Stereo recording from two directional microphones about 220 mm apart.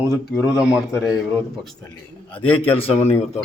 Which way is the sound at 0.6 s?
5° right (ahead or behind).